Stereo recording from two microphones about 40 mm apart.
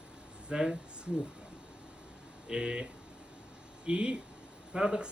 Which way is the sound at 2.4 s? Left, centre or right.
Centre.